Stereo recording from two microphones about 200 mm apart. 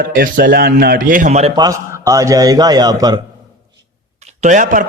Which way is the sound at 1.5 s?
20° right (ahead or behind).